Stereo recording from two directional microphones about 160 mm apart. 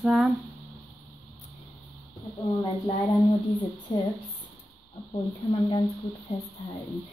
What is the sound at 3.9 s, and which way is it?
Speech, 25° left (ahead or behind).